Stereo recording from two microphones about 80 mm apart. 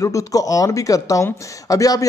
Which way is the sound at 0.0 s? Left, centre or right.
Left.